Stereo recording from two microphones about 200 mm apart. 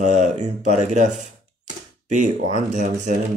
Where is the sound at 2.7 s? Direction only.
35° right (ahead or behind).